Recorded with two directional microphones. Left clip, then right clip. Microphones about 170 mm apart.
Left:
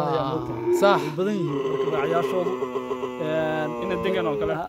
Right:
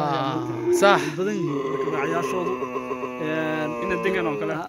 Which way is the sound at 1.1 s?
85° left.